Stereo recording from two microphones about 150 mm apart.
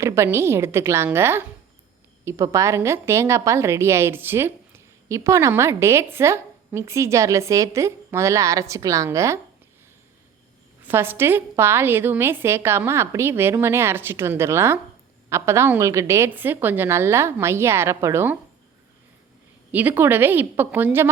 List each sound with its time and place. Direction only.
0.0 s a woman's voice: 15° right (ahead or behind)
10.8 s a woman's voice: 15° right (ahead or behind)
19.7 s a woman's voice: 10° right (ahead or behind)